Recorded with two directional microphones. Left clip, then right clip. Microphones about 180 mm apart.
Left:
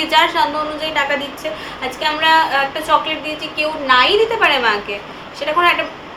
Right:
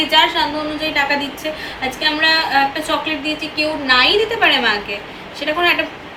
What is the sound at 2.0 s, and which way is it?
A woman's voice, 20° left (ahead or behind).